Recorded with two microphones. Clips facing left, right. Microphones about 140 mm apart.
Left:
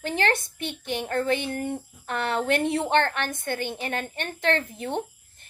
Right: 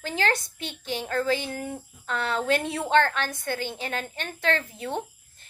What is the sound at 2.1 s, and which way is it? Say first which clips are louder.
A woman's voice: left 1 dB; 55° left (ahead or behind).